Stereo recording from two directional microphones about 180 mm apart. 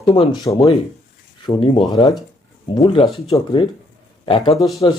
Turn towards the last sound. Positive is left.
turn(degrees=0)  # may be behind; listen again after turning